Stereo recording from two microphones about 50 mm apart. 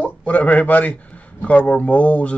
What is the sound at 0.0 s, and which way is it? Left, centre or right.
A man's voice, left.